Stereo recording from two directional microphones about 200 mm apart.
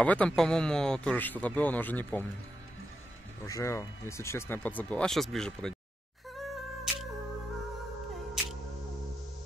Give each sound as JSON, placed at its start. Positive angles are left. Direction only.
{"t": 0.0, "sound": "speech", "side_deg": 5}
{"t": 3.4, "sound": "speech", "side_deg": 15}
{"t": 6.3, "sound": "music", "side_deg": 0}